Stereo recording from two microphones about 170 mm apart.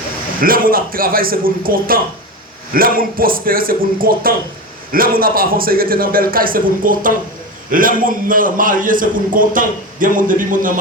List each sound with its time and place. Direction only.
0.4 s a man's voice: 60° right (ahead or behind)